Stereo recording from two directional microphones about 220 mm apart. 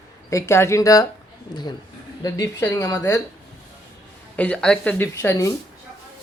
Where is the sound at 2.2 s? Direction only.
15° left (ahead or behind).